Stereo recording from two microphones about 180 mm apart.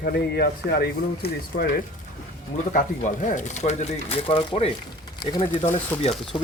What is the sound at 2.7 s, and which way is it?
Speech, 45° left (ahead or behind).